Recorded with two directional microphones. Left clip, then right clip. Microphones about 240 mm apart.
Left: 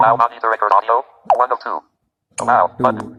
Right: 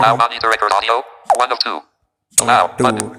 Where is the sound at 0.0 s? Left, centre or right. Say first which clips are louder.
Even; right.